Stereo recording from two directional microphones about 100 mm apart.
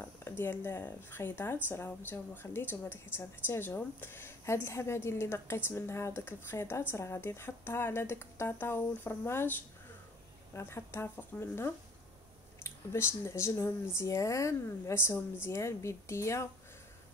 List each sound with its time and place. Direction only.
0.0 s speech: 25° left (ahead or behind)